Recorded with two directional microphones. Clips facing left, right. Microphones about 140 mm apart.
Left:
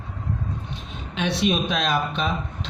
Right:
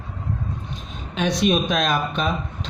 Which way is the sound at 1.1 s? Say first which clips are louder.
Right 3 dB; 40° right (ahead or behind).